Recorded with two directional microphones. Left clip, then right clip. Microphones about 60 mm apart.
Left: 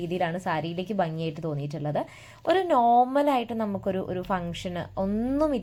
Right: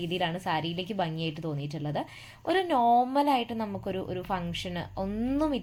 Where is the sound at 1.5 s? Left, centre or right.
Left.